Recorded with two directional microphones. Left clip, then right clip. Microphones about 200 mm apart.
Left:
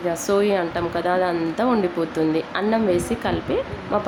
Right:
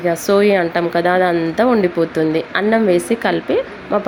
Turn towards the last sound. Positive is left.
turn(degrees=-20)  # may be behind; listen again after turning